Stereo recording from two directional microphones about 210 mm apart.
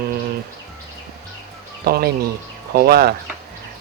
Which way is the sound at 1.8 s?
45° right (ahead or behind).